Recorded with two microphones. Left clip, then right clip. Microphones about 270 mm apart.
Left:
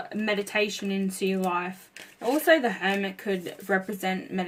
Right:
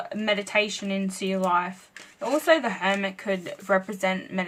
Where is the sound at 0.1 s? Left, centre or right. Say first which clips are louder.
Right 3 dB; centre.